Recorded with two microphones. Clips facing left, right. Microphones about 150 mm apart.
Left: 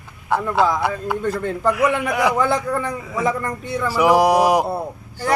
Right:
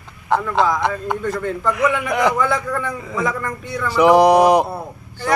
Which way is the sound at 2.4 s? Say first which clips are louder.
Left 1 dB; 30° left (ahead or behind).